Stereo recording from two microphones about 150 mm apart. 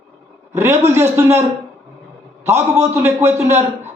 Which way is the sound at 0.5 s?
15° right (ahead or behind).